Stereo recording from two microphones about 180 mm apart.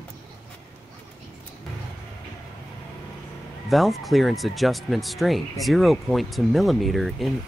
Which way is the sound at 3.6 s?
Centre (ahead or behind).